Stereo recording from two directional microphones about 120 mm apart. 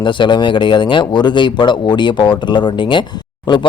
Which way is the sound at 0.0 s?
40° left (ahead or behind).